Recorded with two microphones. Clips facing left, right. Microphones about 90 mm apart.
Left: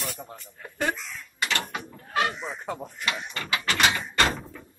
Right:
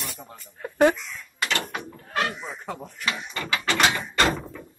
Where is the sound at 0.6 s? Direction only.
75° right (ahead or behind).